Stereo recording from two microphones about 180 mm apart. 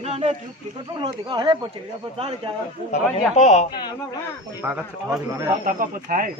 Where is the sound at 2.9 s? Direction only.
40° left (ahead or behind).